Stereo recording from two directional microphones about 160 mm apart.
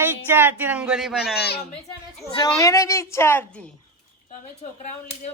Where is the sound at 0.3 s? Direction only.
15° right (ahead or behind).